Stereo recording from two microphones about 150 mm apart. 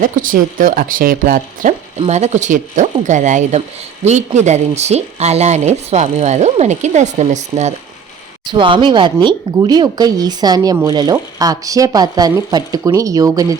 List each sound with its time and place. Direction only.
0.0 s speech: 65° right (ahead or behind)
2.0 s speech: 45° right (ahead or behind)
8.4 s speech: 35° right (ahead or behind)